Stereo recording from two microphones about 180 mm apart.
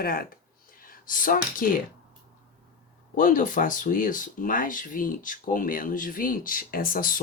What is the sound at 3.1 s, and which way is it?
Speech, 50° left (ahead or behind).